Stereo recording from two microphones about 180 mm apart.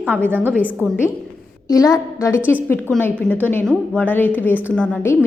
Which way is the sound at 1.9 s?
15° left (ahead or behind).